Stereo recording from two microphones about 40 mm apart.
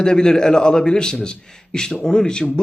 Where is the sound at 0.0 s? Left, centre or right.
Centre.